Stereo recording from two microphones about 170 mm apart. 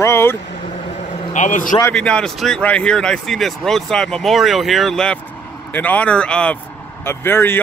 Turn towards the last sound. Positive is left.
turn(degrees=15)  # may be behind; listen again after turning